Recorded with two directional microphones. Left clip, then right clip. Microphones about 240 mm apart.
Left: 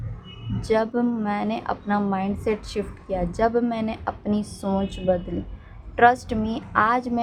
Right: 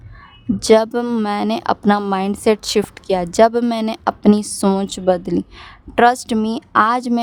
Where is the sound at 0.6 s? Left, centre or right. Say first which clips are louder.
Right 9 dB; right.